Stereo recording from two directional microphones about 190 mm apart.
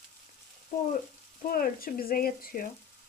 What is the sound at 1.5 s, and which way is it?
Speech, 50° left (ahead or behind).